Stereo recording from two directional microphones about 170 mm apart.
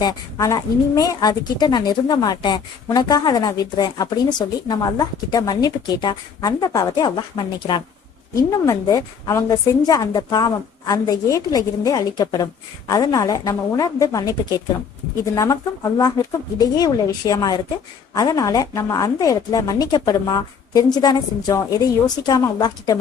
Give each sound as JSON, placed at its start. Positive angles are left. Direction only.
{"t": 0.0, "sound": "a woman's voice", "side_deg": 20}